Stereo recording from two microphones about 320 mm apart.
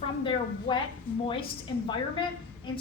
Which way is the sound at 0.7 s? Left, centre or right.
Centre.